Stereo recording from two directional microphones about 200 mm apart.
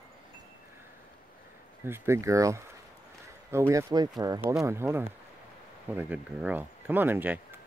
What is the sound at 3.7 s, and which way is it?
Speech, 20° right (ahead or behind).